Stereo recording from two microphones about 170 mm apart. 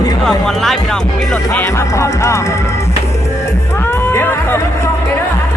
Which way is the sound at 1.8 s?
15° left (ahead or behind).